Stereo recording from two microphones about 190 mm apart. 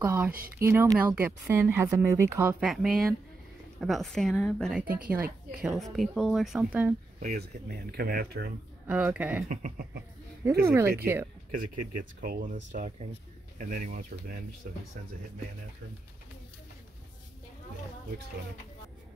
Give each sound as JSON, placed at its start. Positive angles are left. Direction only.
{"t": 0.0, "sound": "a woman's voice", "side_deg": -10}
{"t": 4.8, "sound": "speech", "side_deg": -50}
{"t": 5.6, "sound": "a woman's voice", "side_deg": -5}
{"t": 7.2, "sound": "speech", "side_deg": -50}
{"t": 8.8, "sound": "speech", "side_deg": -5}
{"t": 9.5, "sound": "speech", "side_deg": -45}
{"t": 11.5, "sound": "speech", "side_deg": -45}